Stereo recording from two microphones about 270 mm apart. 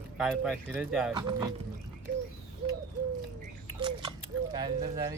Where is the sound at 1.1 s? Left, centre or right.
Centre.